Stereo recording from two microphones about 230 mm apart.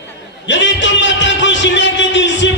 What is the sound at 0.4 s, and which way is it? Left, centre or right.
A man's voice, left.